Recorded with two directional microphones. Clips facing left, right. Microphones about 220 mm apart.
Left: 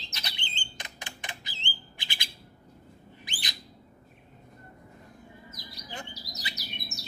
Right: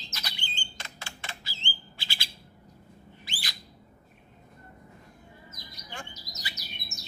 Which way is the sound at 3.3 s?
20° left (ahead or behind).